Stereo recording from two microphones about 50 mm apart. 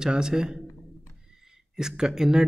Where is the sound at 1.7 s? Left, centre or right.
Centre.